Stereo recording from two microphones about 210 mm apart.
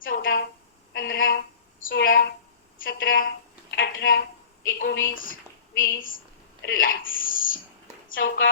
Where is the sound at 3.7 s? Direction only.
55° left (ahead or behind).